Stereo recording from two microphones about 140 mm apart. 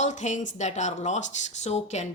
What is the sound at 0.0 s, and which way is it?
Speech, 60° left (ahead or behind).